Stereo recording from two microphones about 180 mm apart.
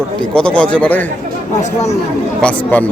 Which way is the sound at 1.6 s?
35° left (ahead or behind).